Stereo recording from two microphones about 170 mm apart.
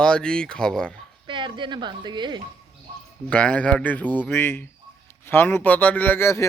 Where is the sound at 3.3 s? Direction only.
5° left (ahead or behind).